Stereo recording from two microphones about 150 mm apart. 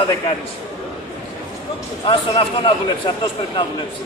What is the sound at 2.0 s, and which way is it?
Speech, 35° left (ahead or behind).